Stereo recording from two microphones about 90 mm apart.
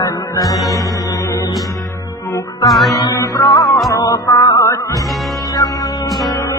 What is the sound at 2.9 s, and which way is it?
Music, 45° left (ahead or behind).